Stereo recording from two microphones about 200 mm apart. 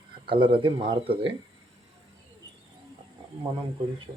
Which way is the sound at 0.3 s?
25° right (ahead or behind).